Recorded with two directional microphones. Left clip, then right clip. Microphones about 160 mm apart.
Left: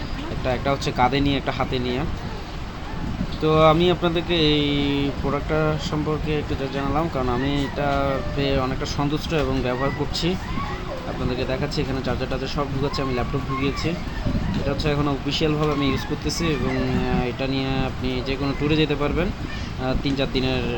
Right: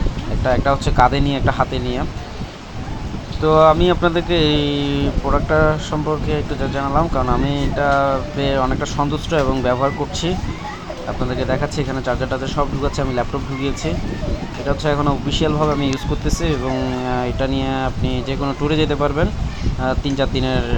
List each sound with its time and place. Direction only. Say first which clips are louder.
0.4 s speech: right 6 dB; 10° right (ahead or behind)
3.4 s speech: right 5 dB; 10° right (ahead or behind)
11.3 s speech: right 5 dB; 15° right (ahead or behind)